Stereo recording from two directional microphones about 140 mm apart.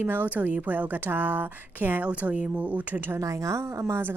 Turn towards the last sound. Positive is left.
turn(degrees=-20)  # may be behind; listen again after turning